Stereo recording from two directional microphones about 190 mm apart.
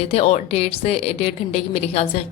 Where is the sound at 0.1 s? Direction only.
30° left (ahead or behind).